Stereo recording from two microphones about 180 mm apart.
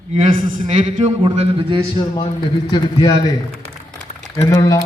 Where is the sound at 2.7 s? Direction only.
20° left (ahead or behind).